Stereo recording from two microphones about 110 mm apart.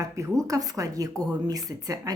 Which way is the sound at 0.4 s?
30° right (ahead or behind).